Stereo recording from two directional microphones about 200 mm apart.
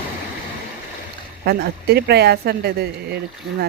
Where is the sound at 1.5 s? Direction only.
55° right (ahead or behind).